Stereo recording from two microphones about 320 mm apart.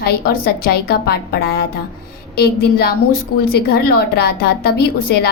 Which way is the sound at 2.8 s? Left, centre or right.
Left.